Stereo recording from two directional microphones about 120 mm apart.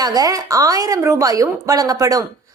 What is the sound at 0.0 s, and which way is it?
A woman's voice, 30° right (ahead or behind).